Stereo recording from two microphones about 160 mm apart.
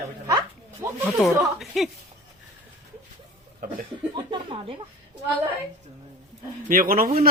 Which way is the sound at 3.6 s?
65° right (ahead or behind).